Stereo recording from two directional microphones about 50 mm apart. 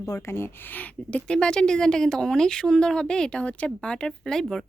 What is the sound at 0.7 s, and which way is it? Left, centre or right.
Speech, left.